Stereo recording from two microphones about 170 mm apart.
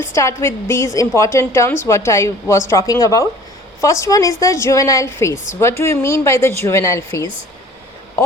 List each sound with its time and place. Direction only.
0.0 s a woman's voice: 15° left (ahead or behind)